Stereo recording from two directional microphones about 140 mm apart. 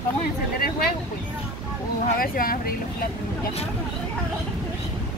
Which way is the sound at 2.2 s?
90° left.